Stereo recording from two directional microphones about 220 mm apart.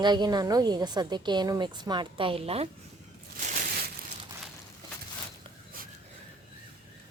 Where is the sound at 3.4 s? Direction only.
40° right (ahead or behind).